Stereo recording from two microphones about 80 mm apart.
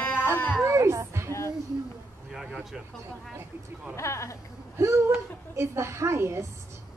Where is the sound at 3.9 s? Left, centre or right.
Left.